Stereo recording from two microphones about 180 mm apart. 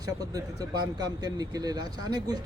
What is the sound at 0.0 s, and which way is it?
Speech, 20° right (ahead or behind).